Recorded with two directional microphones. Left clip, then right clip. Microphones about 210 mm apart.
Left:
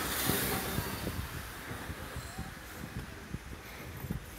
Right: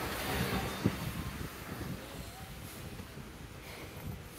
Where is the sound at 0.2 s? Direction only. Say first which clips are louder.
Left 2 dB; 55° left (ahead or behind).